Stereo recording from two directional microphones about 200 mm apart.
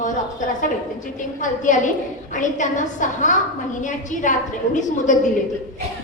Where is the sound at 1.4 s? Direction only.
40° left (ahead or behind).